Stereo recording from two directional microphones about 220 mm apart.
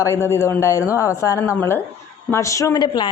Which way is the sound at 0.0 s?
15° left (ahead or behind).